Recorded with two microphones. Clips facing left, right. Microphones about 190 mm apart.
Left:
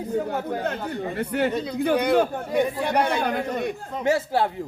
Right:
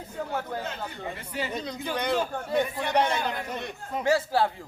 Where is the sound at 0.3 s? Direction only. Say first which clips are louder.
Left 6 dB; 60° left (ahead or behind).